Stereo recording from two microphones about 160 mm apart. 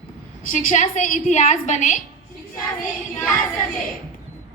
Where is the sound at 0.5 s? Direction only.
50° left (ahead or behind).